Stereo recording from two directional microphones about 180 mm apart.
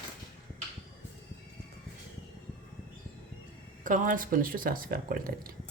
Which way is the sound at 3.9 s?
45° right (ahead or behind).